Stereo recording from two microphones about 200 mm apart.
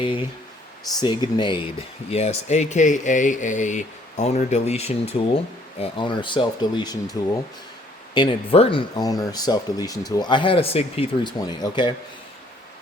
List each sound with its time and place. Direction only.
0.0 s speech: 25° left (ahead or behind)